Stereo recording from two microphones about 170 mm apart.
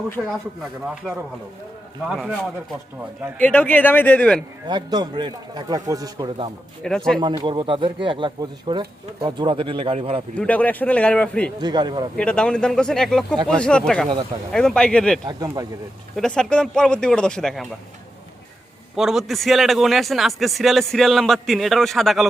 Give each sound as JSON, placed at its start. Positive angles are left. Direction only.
{"t": 0.2, "sound": "a man's voice", "side_deg": 0}
{"t": 3.3, "sound": "a man's voice", "side_deg": 10}
{"t": 4.7, "sound": "speech", "side_deg": -25}
{"t": 6.8, "sound": "a man's voice", "side_deg": 5}
{"t": 7.2, "sound": "speech", "side_deg": -25}
{"t": 10.3, "sound": "a man's voice", "side_deg": 10}
{"t": 11.6, "sound": "speech", "side_deg": -25}
{"t": 12.1, "sound": "a man's voice", "side_deg": 5}
{"t": 18.9, "sound": "a man's voice", "side_deg": 0}